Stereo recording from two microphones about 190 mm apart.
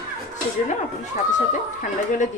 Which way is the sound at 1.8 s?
40° left (ahead or behind).